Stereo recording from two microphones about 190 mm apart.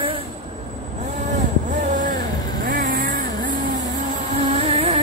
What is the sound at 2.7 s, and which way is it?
Vehicle, 45° right (ahead or behind).